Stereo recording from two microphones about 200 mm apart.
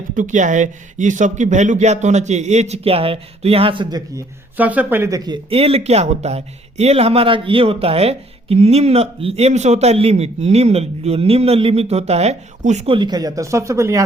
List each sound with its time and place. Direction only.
0.1 s speech: 40° right (ahead or behind); by 4.0 s 20° right (ahead or behind)
4.5 s speech: 10° right (ahead or behind)